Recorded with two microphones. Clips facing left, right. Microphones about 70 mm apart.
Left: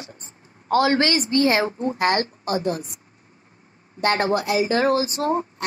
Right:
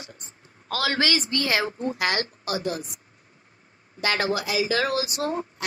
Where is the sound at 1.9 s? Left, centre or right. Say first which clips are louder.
Left 8 dB; left.